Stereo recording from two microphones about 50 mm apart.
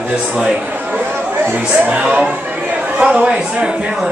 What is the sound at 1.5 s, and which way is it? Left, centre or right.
A man's voice, right.